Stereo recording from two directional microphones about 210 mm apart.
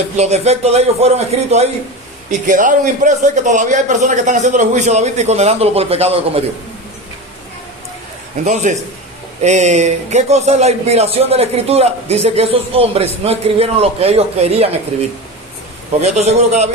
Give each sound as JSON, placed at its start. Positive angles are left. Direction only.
{"t": 0.2, "sound": "speech", "side_deg": -30}
{"t": 8.4, "sound": "speech", "side_deg": -35}
{"t": 16.0, "sound": "speech", "side_deg": -30}